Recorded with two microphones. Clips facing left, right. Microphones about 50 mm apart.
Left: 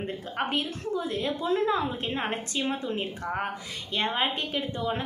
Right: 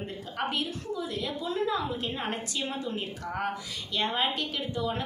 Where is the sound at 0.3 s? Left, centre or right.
Left.